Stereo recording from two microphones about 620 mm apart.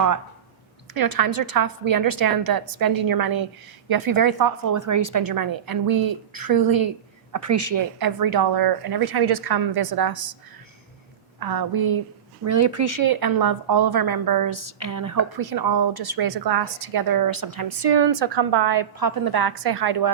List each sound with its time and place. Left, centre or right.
0.9 s a woman's voice: right
11.3 s a woman's voice: right